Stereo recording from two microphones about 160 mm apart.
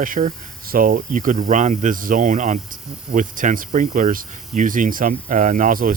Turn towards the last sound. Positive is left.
turn(degrees=-60)  # may be behind; listen again after turning